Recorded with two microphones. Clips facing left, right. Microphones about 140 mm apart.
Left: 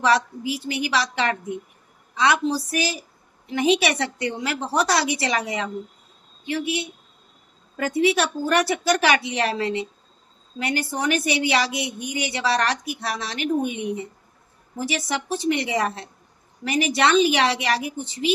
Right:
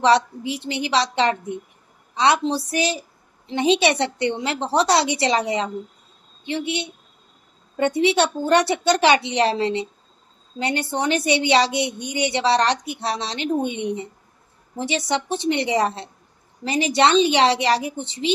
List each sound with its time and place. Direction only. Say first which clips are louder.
0.0 s a woman's voice: right 3 dB; 30° right (ahead or behind)